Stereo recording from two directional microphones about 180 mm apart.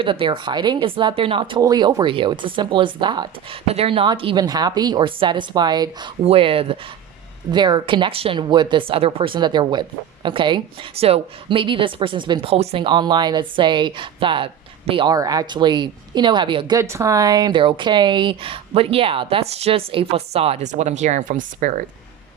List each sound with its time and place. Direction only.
0.0 s a woman's voice: 30° right (ahead or behind); by 21.8 s 45° right (ahead or behind)